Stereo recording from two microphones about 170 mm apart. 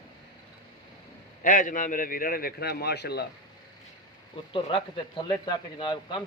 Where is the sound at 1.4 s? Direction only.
50° left (ahead or behind); by 3.2 s 75° left (ahead or behind).